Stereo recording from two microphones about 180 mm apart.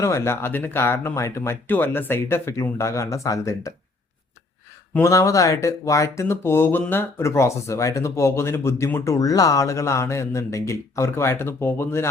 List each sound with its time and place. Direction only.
0.0 s speech: 15° left (ahead or behind)
4.9 s speech: 15° left (ahead or behind)